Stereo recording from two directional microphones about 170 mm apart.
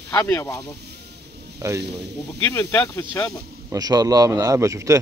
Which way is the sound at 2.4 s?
15° left (ahead or behind).